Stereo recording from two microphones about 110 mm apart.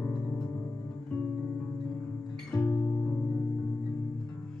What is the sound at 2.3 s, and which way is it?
Music, 15° left (ahead or behind).